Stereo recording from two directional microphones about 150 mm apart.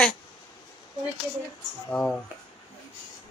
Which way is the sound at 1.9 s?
10° left (ahead or behind).